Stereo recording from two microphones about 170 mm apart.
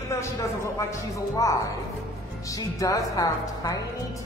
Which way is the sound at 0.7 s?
20° left (ahead or behind).